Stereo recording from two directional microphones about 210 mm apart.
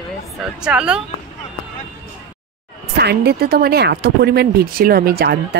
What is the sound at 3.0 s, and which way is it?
Speech, 50° right (ahead or behind).